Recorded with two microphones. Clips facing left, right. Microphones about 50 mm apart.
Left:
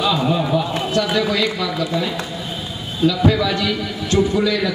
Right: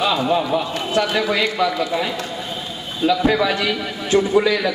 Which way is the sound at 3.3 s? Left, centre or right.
Right.